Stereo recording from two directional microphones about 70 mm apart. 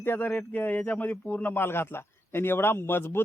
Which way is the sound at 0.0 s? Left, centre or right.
Left.